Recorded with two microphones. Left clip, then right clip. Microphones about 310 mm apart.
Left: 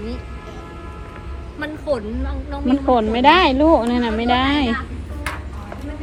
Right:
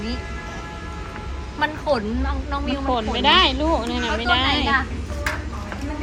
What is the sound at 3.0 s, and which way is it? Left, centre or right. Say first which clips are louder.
Speech: left 2 dB; left.